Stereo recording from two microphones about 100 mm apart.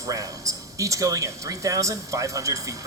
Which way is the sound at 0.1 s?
35° right (ahead or behind).